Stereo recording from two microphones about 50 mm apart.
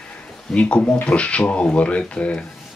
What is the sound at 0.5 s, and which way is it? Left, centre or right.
Speech, left.